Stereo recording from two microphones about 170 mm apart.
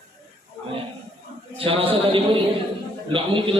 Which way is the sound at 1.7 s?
35° right (ahead or behind).